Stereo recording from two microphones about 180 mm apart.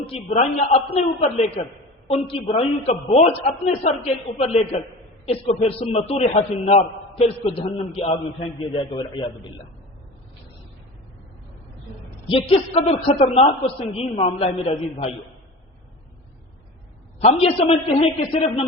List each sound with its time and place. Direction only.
0.1 s a man's voice: 35° left (ahead or behind)
12.3 s a man's voice: 35° left (ahead or behind)
17.2 s a man's voice: 35° left (ahead or behind)